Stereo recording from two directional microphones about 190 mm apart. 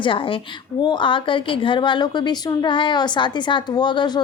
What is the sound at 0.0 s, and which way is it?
A woman's voice, 25° left (ahead or behind).